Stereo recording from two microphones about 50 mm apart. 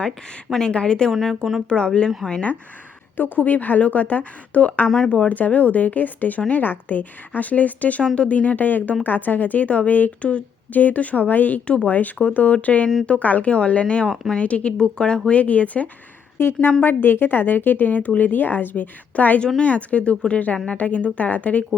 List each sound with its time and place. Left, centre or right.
0.6 s speech: left
1.1 s speech: centre
1.7 s speech: centre
3.2 s a woman's voice: left
5.0 s speech: left
5.3 s a woman's voice: left
11.6 s speech: left
11.9 s a woman's voice: left; by 15.2 s centre
15.3 s speech: left
16.4 s a woman's voice: left